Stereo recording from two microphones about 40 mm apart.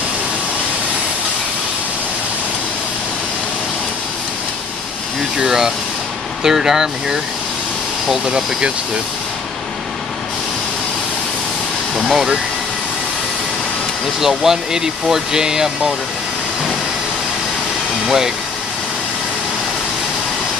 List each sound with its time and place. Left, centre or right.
5.4 s speech: centre
8.3 s speech: right
12.0 s a sound: centre
14.2 s speech: centre
18.0 s speech: centre